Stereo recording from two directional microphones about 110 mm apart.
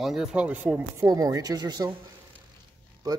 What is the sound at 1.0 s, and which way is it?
Speech, 30° right (ahead or behind).